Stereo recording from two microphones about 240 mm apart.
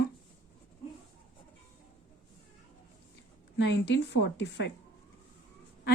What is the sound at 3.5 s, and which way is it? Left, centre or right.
Speech, left.